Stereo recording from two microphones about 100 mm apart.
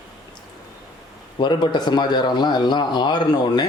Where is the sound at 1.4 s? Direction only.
45° left (ahead or behind).